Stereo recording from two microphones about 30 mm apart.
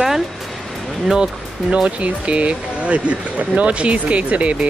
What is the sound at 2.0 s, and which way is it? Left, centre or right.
Speech, right.